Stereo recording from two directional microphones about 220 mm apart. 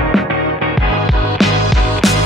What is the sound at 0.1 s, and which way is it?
Music, centre (ahead or behind).